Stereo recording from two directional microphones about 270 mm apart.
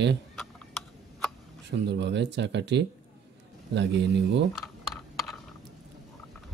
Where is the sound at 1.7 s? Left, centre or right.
Right.